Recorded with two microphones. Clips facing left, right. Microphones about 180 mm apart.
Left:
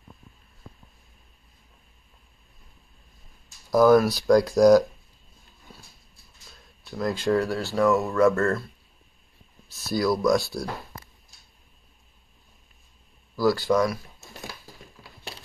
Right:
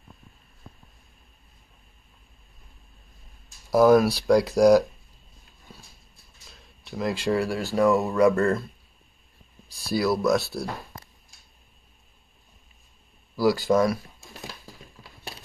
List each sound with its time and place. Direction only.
3.7 s speech: 10° right (ahead or behind)
7.0 s speech: 10° right (ahead or behind)
9.8 s speech: 10° right (ahead or behind)
13.4 s speech: 15° right (ahead or behind)
13.7 s speech: 25° right (ahead or behind)